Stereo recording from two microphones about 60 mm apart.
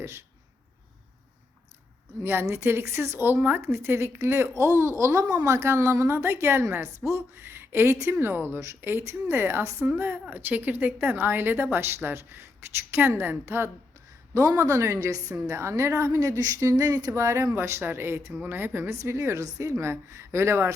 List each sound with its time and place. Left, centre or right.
0.0 s a woman's voice: right
2.2 s a woman's voice: right
3.6 s a woman's voice: right
5.6 s a woman's voice: right
7.9 s a woman's voice: right
8.2 s a woman's voice: right
14.3 s a woman's voice: right
15.5 s a woman's voice: right
17.1 s a woman's voice: right
18.4 s a woman's voice: right
19.7 s a woman's voice: right